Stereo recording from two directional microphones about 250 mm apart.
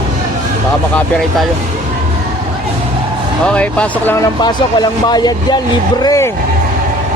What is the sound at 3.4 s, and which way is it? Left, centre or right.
Speech, centre.